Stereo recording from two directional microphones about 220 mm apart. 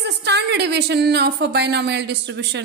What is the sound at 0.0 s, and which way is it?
Speech, 50° right (ahead or behind).